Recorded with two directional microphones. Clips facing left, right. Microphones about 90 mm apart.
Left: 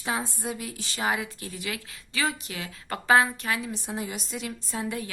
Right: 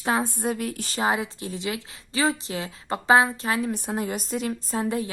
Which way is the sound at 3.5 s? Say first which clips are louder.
Right 6 dB; 45° right (ahead or behind).